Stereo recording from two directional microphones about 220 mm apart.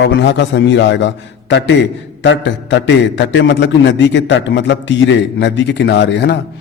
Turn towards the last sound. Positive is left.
turn(degrees=55)  # may be behind; listen again after turning